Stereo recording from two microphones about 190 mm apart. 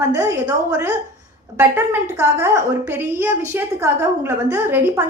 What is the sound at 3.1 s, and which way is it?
A woman's voice, 10° right (ahead or behind).